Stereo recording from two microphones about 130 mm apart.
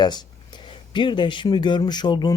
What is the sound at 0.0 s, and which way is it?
Speech, 35° left (ahead or behind).